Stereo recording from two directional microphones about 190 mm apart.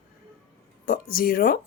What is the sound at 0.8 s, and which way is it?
Speech, 50° left (ahead or behind).